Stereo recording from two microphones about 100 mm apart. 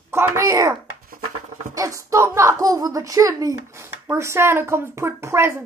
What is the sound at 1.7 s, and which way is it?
A woman's voice, 35° right (ahead or behind).